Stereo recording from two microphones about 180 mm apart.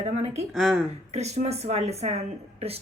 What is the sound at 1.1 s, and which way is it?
A woman's voice, 35° right (ahead or behind).